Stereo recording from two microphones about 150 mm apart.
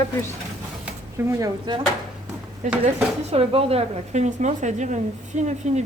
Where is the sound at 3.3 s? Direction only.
40° right (ahead or behind).